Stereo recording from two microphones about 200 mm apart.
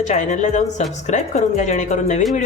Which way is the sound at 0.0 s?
40° left (ahead or behind).